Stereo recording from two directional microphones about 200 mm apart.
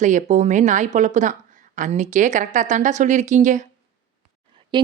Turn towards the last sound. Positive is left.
turn(degrees=-25)  # may be behind; listen again after turning